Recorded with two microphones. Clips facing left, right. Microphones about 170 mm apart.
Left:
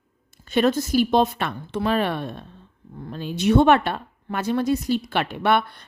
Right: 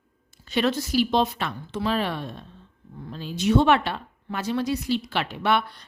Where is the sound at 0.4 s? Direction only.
50° left (ahead or behind).